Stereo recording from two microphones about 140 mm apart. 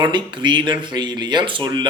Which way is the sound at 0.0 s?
35° right (ahead or behind).